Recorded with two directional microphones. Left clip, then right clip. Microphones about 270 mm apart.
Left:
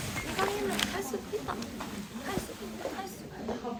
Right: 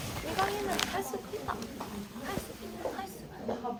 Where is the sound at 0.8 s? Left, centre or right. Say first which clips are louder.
Left 1 dB; centre.